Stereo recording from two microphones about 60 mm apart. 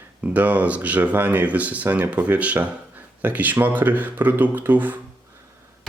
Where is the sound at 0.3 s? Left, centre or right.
Right.